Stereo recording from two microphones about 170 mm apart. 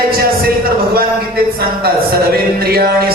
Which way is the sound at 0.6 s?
60° right (ahead or behind).